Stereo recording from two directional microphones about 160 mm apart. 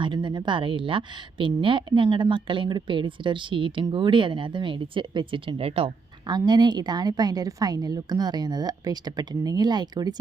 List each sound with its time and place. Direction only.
0.0 s speech: 30° right (ahead or behind)